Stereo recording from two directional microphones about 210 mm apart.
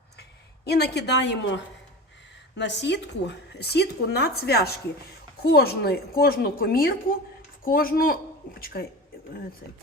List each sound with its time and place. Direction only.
0.2 s a woman's voice: 50° left (ahead or behind)